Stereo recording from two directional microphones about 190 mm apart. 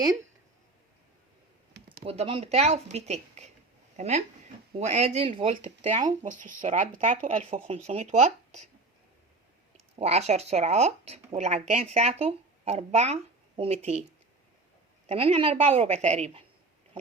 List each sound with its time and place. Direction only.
2.0 s speech: 30° right (ahead or behind)
10.0 s speech: 35° right (ahead or behind)
15.0 s speech: 30° right (ahead or behind)